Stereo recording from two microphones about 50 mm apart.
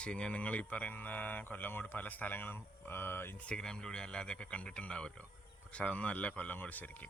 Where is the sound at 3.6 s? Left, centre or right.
Centre; by 7.0 s left.